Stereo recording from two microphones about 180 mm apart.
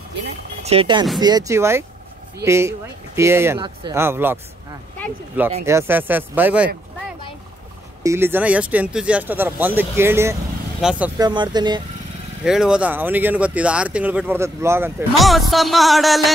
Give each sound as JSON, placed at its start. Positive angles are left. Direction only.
{"t": 0.7, "sound": "speech", "side_deg": -30}
{"t": 3.5, "sound": "speech", "side_deg": -25}
{"t": 3.9, "sound": "speech", "side_deg": -15}
{"t": 8.0, "sound": "speech", "side_deg": -15}
{"t": 11.1, "sound": "speech", "side_deg": -25}
{"t": 12.4, "sound": "speech", "side_deg": -5}
{"t": 15.1, "sound": "music", "side_deg": 0}